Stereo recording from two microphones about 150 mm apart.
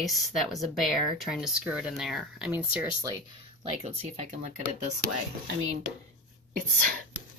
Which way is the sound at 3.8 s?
45° right (ahead or behind).